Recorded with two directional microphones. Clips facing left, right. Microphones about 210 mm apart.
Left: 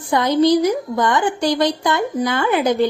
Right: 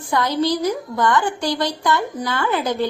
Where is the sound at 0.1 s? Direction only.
20° left (ahead or behind).